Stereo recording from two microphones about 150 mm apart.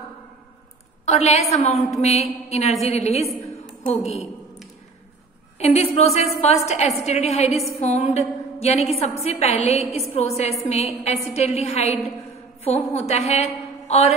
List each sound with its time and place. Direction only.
1.0 s a woman's voice: 45° left (ahead or behind)
3.4 s a sound: 45° left (ahead or behind)
5.6 s a woman's voice: 45° left (ahead or behind)